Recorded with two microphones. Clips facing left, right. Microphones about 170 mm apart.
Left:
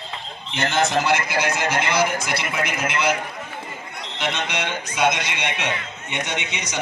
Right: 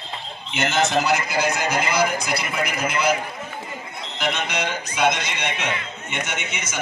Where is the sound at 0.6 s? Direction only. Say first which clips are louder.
Even; centre (ahead or behind).